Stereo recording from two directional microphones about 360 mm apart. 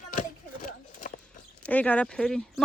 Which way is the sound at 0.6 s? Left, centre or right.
Left.